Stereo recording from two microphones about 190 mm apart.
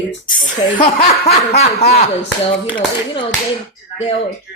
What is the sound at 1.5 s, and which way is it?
Speech, 35° left (ahead or behind).